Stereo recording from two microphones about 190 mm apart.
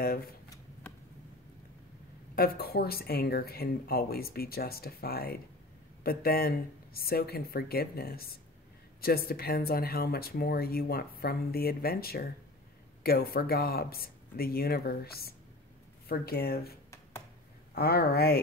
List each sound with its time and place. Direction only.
0.0 s speech: 50° left (ahead or behind)
2.3 s speech: 50° left (ahead or behind)
17.7 s speech: 55° left (ahead or behind)